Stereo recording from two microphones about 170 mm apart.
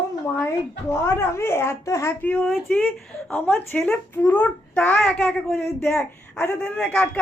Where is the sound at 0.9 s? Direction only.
15° left (ahead or behind).